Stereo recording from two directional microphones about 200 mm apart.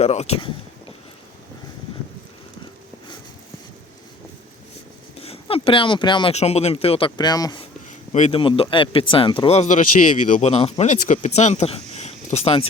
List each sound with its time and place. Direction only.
0.0 s speech: 30° left (ahead or behind)
5.2 s speech: 30° left (ahead or behind)
7.9 s speech: 35° left (ahead or behind)